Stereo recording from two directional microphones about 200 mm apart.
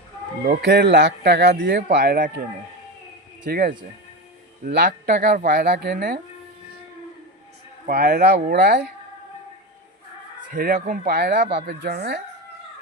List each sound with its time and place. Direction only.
0.6 s a man's voice: 55° right (ahead or behind)
3.5 s speech: 45° right (ahead or behind)
7.9 s speech: 50° right (ahead or behind)
10.5 s speech: 45° right (ahead or behind)